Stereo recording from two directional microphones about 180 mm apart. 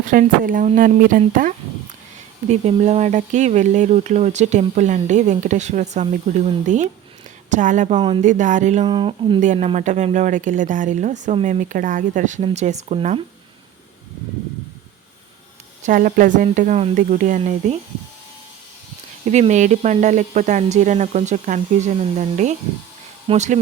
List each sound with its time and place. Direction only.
0.0 s speech: 50° right (ahead or behind)
2.5 s speech: 40° right (ahead or behind)
8.9 s speech: 25° right (ahead or behind)
9.4 s speech: 40° right (ahead or behind)
15.8 s speech: 50° right (ahead or behind)
19.2 s speech: 40° right (ahead or behind)